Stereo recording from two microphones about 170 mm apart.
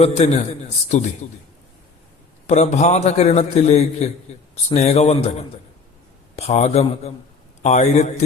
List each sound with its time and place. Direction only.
0.0 s a man's voice: 35° left (ahead or behind)
2.5 s a man's voice: 40° left (ahead or behind)